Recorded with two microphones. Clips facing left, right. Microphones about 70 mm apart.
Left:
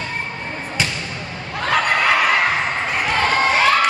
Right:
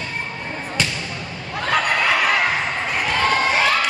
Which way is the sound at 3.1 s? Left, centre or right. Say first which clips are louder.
Left 1 dB; centre.